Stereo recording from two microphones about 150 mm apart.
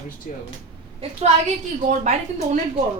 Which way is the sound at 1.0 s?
45° right (ahead or behind).